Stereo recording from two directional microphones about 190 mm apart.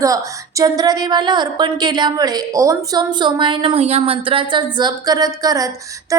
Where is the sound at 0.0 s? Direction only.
15° right (ahead or behind).